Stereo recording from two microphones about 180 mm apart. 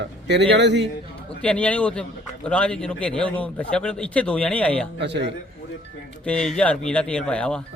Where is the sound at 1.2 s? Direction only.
5° left (ahead or behind).